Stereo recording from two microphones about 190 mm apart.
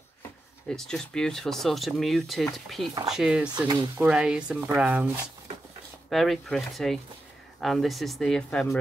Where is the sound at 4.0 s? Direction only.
5° right (ahead or behind).